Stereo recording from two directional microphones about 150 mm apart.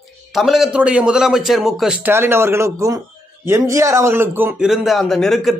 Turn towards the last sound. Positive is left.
turn(degrees=0)  # may be behind; listen again after turning